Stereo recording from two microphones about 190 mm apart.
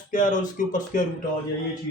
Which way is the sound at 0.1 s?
45° left (ahead or behind).